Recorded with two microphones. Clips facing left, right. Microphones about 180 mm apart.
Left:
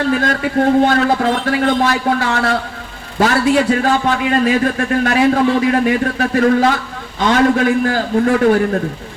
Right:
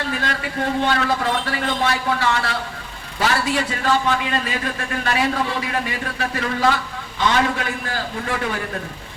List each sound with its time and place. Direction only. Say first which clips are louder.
0.1 s a man's voice: left 9 dB; 45° left (ahead or behind)